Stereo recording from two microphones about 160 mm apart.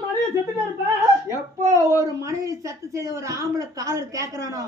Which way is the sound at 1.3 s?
20° right (ahead or behind).